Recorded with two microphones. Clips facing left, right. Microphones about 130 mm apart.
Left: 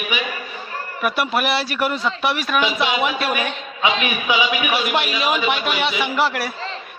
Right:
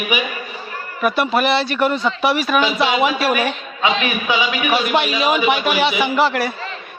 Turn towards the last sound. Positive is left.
turn(degrees=0)  # may be behind; listen again after turning